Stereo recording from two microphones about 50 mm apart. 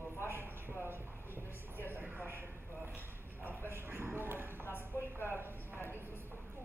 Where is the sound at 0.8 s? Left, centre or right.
Right.